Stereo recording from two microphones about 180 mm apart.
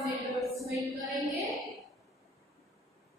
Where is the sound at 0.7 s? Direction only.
15° right (ahead or behind).